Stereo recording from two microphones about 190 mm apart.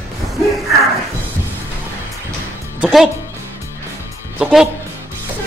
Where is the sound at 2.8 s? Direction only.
Centre (ahead or behind).